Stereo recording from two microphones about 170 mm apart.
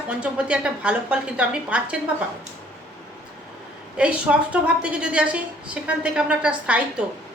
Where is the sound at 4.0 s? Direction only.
5° right (ahead or behind).